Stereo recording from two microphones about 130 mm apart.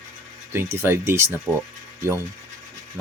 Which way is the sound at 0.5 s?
20° right (ahead or behind).